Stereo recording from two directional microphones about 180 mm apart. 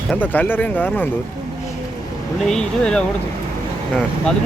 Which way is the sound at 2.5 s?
5° left (ahead or behind).